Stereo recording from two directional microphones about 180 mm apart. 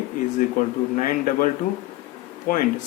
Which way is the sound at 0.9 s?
50° left (ahead or behind).